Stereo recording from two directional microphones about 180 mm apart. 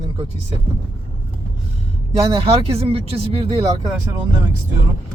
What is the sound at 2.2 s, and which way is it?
Speech, 30° right (ahead or behind).